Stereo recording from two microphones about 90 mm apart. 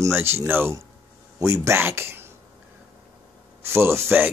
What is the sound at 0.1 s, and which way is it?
Speech, 25° right (ahead or behind).